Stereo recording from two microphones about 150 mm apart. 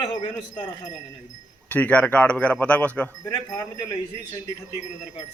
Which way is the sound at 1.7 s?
10° left (ahead or behind).